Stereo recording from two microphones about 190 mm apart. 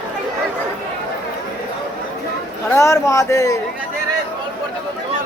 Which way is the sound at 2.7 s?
15° left (ahead or behind).